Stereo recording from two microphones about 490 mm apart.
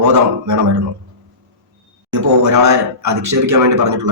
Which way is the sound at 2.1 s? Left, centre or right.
Right.